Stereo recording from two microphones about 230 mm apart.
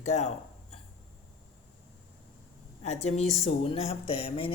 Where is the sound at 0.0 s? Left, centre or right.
Left.